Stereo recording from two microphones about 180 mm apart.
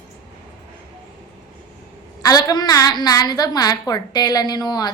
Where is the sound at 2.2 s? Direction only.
20° left (ahead or behind).